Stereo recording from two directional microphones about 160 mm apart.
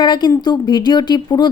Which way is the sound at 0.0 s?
25° left (ahead or behind).